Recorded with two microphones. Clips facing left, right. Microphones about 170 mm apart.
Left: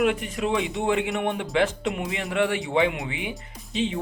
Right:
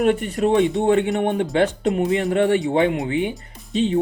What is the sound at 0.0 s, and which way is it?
A man's voice, 40° right (ahead or behind).